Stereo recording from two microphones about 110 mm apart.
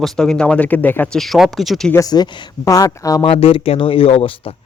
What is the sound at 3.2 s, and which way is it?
Speech, 60° left (ahead or behind).